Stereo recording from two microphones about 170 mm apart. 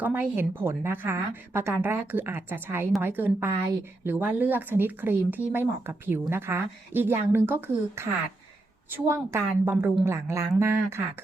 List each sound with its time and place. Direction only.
0.0 s a woman's voice: 10° right (ahead or behind)